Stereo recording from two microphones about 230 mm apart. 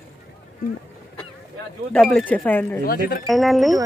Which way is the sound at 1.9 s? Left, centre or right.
Centre.